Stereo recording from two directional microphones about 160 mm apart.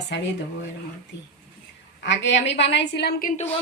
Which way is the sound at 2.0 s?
90° left.